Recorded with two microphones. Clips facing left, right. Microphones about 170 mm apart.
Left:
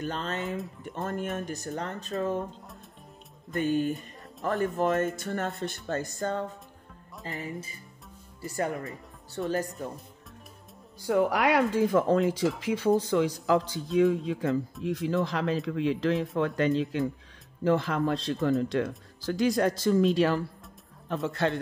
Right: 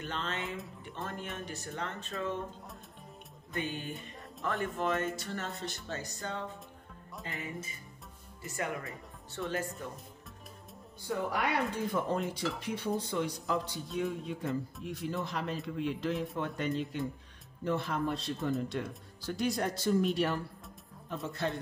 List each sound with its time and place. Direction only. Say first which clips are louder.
0.0 s speech: left 5 dB; 40° left (ahead or behind)
3.5 s speech: left 11 dB; 45° left (ahead or behind)
7.3 s speech: left 5 dB; 35° left (ahead or behind)
11.0 s a man's voice: left 9 dB; 90° left